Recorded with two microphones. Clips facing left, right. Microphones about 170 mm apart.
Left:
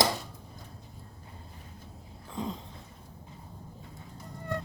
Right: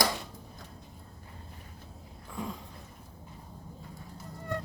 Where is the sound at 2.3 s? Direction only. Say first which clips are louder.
Left 3 dB; 20° left (ahead or behind).